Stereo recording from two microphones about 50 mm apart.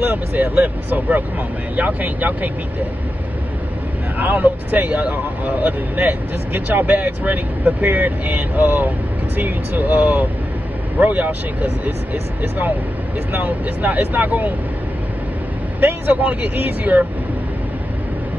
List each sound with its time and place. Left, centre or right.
0.0 s speech: right
4.2 s speech: right
15.8 s speech: right